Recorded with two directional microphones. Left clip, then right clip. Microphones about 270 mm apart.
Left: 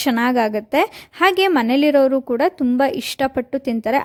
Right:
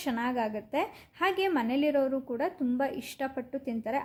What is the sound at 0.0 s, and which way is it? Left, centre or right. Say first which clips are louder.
A woman's voice: left 13 dB; left.